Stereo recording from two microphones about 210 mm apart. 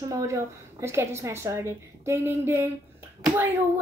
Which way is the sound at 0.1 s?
15° right (ahead or behind).